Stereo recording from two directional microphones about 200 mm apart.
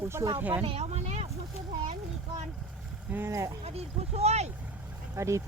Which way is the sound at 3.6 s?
30° right (ahead or behind).